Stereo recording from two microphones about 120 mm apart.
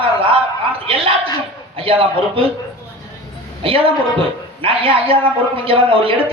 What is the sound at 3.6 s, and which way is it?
A man's voice, 50° right (ahead or behind).